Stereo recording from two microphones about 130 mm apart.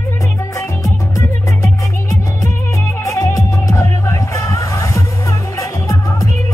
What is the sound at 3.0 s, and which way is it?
Music, 25° left (ahead or behind).